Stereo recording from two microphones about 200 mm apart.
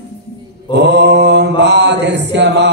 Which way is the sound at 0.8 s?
55° right (ahead or behind).